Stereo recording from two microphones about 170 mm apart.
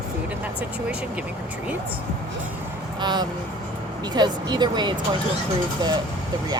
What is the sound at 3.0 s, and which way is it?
Speech, 25° right (ahead or behind).